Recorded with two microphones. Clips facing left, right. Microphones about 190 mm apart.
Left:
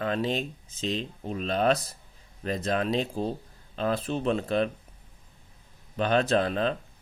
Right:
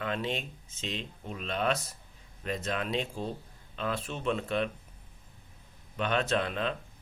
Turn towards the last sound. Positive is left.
turn(degrees=35)  # may be behind; listen again after turning